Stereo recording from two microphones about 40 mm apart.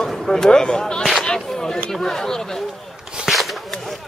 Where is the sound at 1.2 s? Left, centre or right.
Centre.